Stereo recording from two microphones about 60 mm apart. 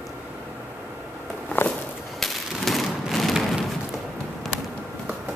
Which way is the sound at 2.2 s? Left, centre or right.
Centre.